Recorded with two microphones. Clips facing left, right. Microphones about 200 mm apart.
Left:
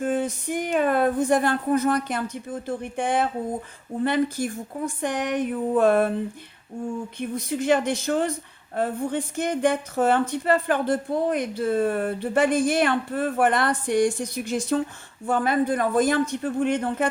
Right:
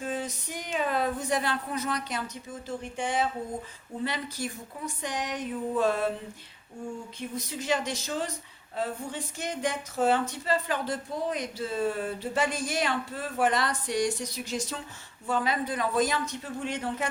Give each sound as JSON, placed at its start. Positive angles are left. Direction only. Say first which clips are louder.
{"t": 0.0, "sound": "speech", "louder": "left 8 dB", "side_deg": 55}
{"t": 7.2, "sound": "speech", "louder": "left 9 dB", "side_deg": 55}